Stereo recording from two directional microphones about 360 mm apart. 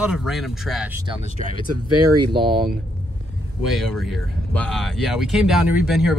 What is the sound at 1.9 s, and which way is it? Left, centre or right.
Speech, right.